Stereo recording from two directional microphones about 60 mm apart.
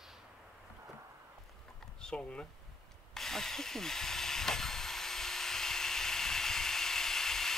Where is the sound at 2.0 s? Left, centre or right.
Centre.